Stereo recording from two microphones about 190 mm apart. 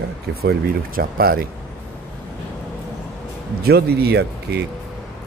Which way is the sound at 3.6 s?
55° right (ahead or behind).